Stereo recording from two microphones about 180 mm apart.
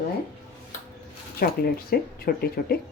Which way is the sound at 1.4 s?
55° left (ahead or behind).